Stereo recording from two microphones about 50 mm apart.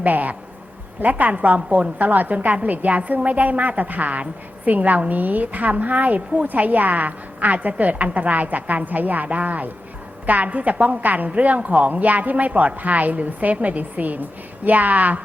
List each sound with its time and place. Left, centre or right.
0.0 s a woman's voice: right